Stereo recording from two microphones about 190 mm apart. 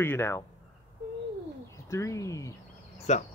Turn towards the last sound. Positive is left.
turn(degrees=40)  # may be behind; listen again after turning